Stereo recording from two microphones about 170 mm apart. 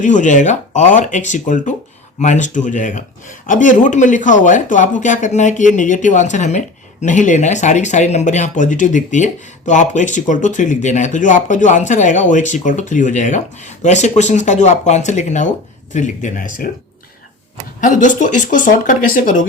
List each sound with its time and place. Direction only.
0.0 s speech: 45° left (ahead or behind)
17.7 s speech: 50° left (ahead or behind)